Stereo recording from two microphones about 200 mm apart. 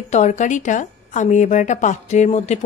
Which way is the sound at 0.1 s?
35° left (ahead or behind).